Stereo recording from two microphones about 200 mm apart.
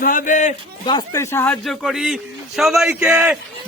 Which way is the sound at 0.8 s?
15° left (ahead or behind).